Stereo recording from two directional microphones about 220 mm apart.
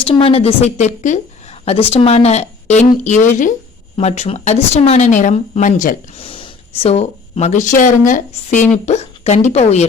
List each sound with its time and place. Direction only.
0.0 s speech: 25° left (ahead or behind)
6.2 s a woman's voice: 25° left (ahead or behind)